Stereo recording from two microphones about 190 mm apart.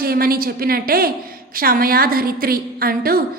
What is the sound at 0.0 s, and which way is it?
A woman's voice, 50° right (ahead or behind).